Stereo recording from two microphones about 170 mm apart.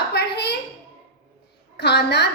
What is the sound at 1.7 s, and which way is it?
Speech, 80° left.